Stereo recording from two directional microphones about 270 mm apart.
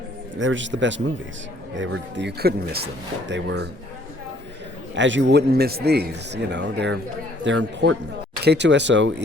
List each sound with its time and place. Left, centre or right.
0.3 s a man's voice: right
4.9 s a man's voice: right